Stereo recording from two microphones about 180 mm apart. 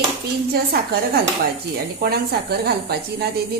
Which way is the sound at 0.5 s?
60° right (ahead or behind).